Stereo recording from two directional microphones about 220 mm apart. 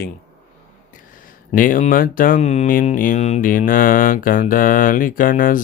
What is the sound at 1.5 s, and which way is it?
Speech, 40° left (ahead or behind).